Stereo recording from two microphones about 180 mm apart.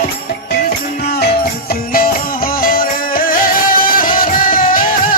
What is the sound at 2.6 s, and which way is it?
Music, 50° left (ahead or behind).